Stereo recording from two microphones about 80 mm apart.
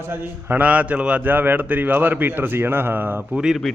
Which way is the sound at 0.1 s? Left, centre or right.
Right.